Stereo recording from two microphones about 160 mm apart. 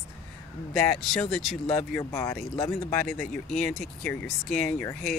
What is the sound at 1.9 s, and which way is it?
Speech, 15° left (ahead or behind).